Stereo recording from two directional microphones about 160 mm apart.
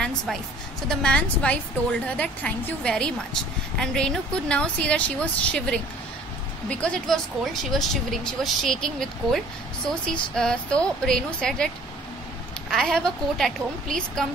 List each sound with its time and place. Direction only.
0.0 s a sound: 5° left (ahead or behind)
0.8 s speech: 5° left (ahead or behind)
12.7 s speech: 5° left (ahead or behind)